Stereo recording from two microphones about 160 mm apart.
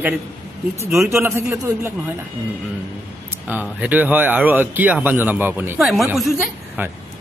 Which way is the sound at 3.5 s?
10° right (ahead or behind).